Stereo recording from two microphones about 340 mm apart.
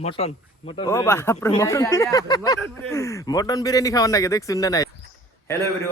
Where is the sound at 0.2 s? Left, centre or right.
Centre.